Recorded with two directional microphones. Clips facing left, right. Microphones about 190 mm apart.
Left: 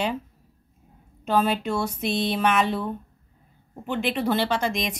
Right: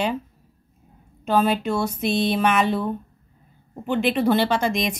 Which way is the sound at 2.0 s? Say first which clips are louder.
Right 4 dB; 55° right (ahead or behind).